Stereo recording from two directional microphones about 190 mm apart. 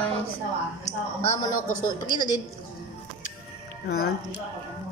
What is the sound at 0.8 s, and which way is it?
A woman's voice, 20° left (ahead or behind).